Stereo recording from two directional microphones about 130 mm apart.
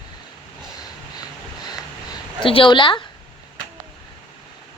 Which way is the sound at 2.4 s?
40° left (ahead or behind).